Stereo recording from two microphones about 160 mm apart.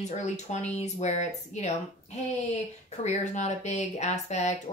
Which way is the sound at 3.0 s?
45° left (ahead or behind).